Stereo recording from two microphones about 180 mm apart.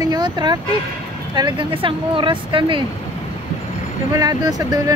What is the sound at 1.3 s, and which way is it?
Speech, 25° right (ahead or behind).